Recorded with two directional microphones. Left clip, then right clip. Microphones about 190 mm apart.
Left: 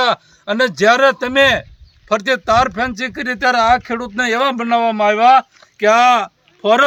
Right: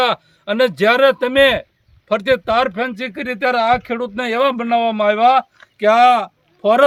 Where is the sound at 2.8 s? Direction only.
80° right.